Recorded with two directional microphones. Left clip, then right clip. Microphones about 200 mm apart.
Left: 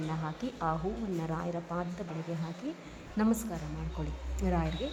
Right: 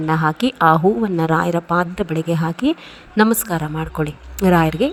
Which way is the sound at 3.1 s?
35° right (ahead or behind).